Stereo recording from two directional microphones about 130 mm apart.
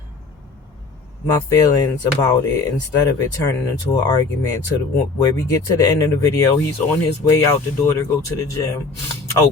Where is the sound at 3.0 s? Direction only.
25° left (ahead or behind).